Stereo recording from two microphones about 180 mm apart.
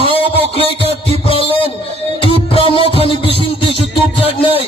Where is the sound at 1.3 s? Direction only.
30° left (ahead or behind).